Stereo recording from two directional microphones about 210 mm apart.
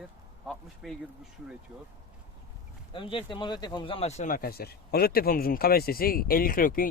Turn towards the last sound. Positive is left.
turn(degrees=45)  # may be behind; listen again after turning